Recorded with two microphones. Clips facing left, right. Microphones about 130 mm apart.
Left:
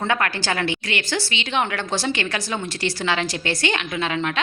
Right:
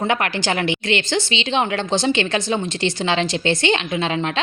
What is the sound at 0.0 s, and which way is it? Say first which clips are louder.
A woman's voice: right 2 dB; 20° right (ahead or behind).